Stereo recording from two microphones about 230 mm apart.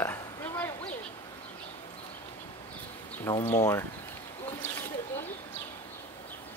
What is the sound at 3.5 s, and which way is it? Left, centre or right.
Speech, centre.